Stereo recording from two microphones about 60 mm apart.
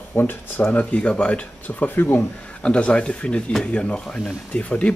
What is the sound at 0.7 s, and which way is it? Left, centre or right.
Speech, centre.